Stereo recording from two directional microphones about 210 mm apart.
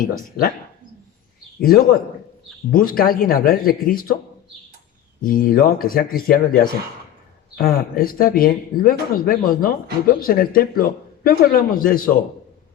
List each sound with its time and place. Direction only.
0.0 s speech: 40° left (ahead or behind)
1.6 s speech: 45° left (ahead or behind)
5.2 s speech: 40° left (ahead or behind)